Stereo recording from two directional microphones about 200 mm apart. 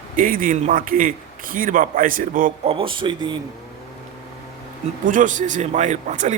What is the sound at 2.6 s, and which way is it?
Speech, 25° right (ahead or behind).